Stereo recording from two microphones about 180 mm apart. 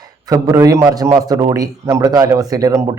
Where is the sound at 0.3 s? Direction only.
20° right (ahead or behind).